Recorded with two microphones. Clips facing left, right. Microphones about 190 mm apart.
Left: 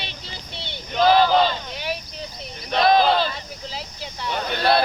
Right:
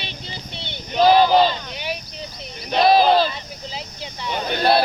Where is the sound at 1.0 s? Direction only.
10° right (ahead or behind).